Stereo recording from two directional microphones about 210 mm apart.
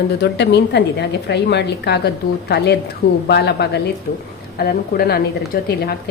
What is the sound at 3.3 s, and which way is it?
A woman's voice, 50° left (ahead or behind).